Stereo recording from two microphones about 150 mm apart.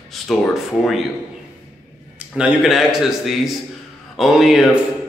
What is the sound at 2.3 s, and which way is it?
A man's voice, 5° right (ahead or behind).